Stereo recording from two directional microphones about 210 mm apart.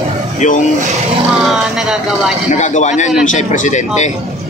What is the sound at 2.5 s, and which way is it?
A man's voice, 35° left (ahead or behind).